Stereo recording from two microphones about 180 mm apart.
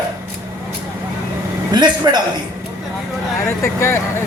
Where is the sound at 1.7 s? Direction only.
25° right (ahead or behind).